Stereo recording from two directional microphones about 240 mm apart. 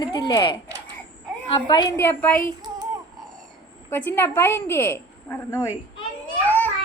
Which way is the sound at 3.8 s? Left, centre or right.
Centre.